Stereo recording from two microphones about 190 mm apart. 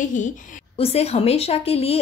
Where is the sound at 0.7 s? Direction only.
30° left (ahead or behind).